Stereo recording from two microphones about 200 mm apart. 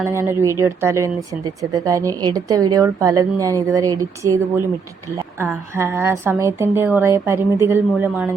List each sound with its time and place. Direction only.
0.0 s speech: 15° right (ahead or behind)